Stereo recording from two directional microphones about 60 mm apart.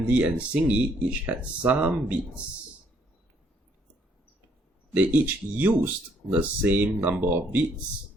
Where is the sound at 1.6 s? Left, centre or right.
Right.